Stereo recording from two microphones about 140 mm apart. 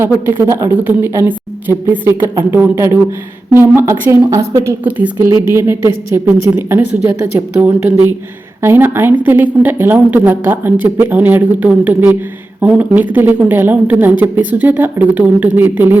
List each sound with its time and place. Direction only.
0.0 s a woman's voice: 15° right (ahead or behind)